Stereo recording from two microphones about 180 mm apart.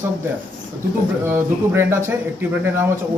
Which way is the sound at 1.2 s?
10° right (ahead or behind).